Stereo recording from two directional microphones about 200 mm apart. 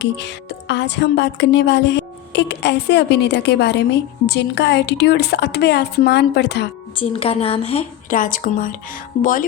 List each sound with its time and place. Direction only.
0.0 s music: 60° left (ahead or behind)
6.9 s a woman's voice: 25° left (ahead or behind)